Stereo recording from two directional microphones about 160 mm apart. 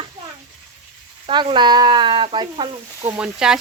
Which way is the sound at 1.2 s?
30° right (ahead or behind).